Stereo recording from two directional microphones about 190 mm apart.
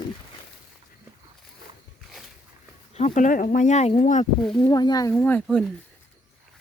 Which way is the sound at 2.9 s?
40° left (ahead or behind).